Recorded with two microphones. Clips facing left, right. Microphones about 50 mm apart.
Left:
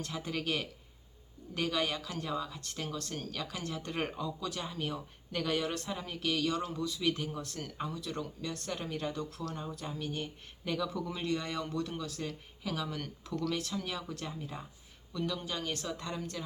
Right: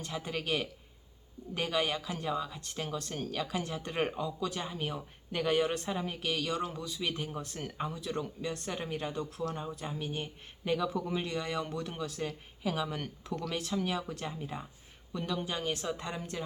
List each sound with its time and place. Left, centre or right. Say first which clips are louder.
0.0 s speech: even; centre